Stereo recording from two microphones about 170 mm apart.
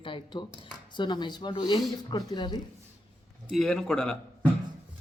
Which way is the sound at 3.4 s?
Centre (ahead or behind).